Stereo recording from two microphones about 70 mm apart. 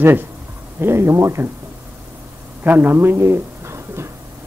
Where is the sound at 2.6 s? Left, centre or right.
Right.